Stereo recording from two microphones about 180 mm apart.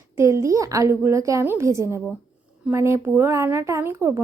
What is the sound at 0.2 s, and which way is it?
A woman's voice, 15° right (ahead or behind).